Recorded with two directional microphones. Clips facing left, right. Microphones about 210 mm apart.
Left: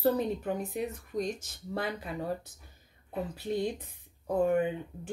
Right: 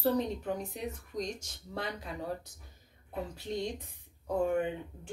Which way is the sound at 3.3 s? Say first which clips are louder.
Left 5 dB; 5° left (ahead or behind).